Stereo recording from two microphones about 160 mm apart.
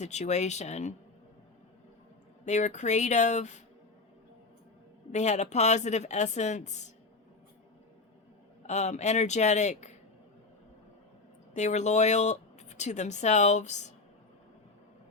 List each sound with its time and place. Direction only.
0.0 s speech: 45° left (ahead or behind)
2.4 s speech: 45° left (ahead or behind)
5.1 s speech: 45° left (ahead or behind)
8.6 s speech: 45° left (ahead or behind)
11.5 s speech: 45° left (ahead or behind)